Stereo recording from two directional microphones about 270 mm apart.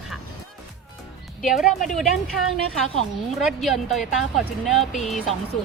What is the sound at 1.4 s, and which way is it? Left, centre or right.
Speech, centre.